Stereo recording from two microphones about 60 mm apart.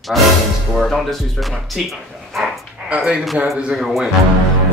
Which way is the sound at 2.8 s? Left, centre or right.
Centre.